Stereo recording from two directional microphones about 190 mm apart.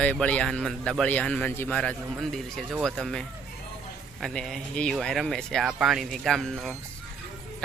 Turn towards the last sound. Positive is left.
turn(degrees=0)  # may be behind; listen again after turning